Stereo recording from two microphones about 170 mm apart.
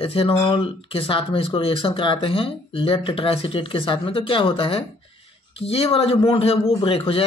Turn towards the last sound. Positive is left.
turn(degrees=30)  # may be behind; listen again after turning